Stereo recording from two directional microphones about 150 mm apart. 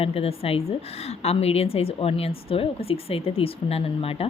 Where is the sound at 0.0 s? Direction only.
40° left (ahead or behind).